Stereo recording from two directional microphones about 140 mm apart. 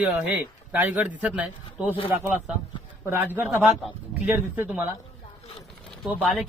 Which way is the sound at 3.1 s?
15° right (ahead or behind).